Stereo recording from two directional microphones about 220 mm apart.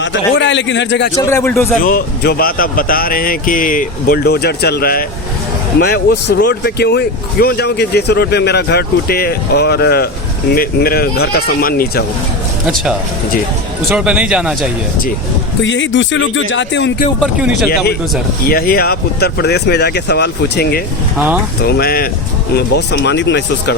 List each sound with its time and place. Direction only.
0.0 s speech: 55° left (ahead or behind)
1.1 s a man's voice: 15° left (ahead or behind)
1.8 s speech: 40° left (ahead or behind)
12.6 s speech: 5° right (ahead or behind)
15.6 s speech: 55° left (ahead or behind)
17.2 s speech: centre (ahead or behind)
18.4 s speech: 45° left (ahead or behind)